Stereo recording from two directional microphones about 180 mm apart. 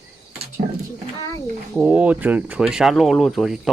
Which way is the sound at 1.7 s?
5° right (ahead or behind).